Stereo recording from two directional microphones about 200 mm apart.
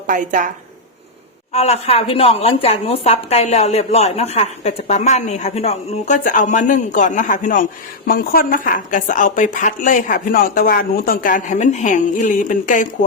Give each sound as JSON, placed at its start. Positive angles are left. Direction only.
{"t": 0.1, "sound": "a woman's voice", "side_deg": -40}
{"t": 1.5, "sound": "speech", "side_deg": 30}